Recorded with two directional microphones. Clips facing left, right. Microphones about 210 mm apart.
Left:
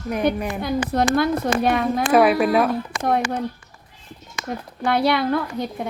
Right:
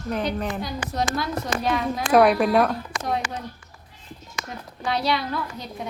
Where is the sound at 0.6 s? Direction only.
55° left (ahead or behind).